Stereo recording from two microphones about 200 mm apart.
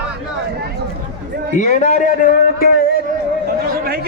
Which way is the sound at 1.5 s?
40° left (ahead or behind).